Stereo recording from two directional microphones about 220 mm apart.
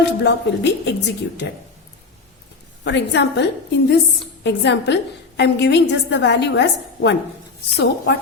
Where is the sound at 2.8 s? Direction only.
55° left (ahead or behind).